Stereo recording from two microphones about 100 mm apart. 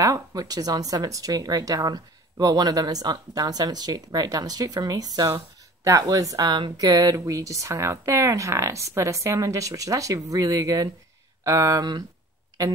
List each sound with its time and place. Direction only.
0.0 s speech: 35° right (ahead or behind)